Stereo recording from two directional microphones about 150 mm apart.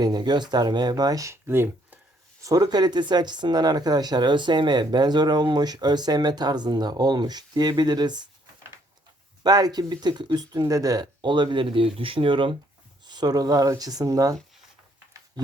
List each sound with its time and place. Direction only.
0.0 s speech: 30° right (ahead or behind)
9.4 s speech: 25° right (ahead or behind)